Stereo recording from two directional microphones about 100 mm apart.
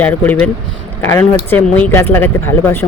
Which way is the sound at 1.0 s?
25° left (ahead or behind).